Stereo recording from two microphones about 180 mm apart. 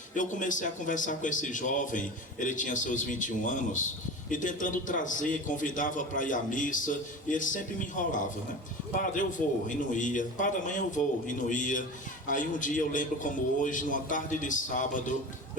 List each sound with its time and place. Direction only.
0.2 s a man's voice: 45° left (ahead or behind)